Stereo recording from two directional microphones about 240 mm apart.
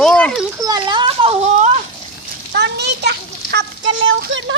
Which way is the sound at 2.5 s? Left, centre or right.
Right.